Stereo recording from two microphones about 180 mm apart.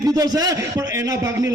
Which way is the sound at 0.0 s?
20° right (ahead or behind).